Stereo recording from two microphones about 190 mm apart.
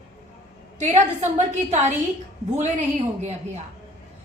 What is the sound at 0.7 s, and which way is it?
A woman's voice, 35° right (ahead or behind).